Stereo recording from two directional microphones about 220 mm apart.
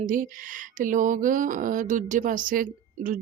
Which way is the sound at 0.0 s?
35° right (ahead or behind).